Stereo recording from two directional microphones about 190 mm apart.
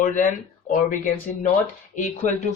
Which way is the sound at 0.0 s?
45° left (ahead or behind).